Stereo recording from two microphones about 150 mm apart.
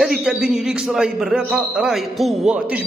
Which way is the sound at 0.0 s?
5° right (ahead or behind).